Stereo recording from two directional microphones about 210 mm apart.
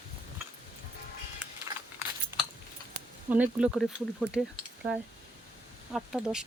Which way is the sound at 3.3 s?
5° right (ahead or behind).